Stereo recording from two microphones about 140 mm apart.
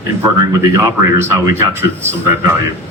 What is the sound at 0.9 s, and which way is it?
Speech, 20° right (ahead or behind).